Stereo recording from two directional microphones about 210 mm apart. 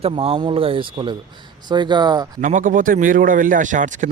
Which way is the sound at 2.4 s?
40° right (ahead or behind).